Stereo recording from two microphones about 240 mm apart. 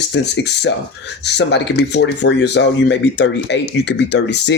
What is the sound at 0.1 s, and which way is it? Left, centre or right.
Speech, left.